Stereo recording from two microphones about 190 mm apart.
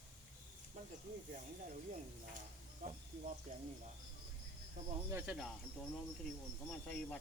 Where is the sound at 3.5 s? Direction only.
40° right (ahead or behind).